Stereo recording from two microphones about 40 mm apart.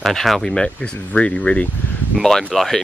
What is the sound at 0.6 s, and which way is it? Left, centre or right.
Speech, left.